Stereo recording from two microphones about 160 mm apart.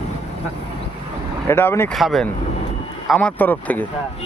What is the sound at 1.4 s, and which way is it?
Speech, 15° left (ahead or behind).